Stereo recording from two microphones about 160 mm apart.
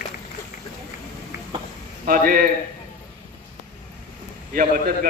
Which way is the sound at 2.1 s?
60° right (ahead or behind).